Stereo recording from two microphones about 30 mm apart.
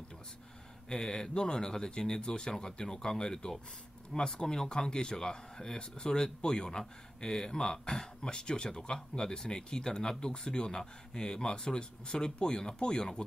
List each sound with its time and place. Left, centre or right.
0.9 s a man's voice: centre
9.8 s speech: centre